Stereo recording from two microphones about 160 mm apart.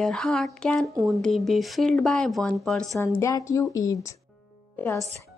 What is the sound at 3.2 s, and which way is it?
Speech, 20° left (ahead or behind).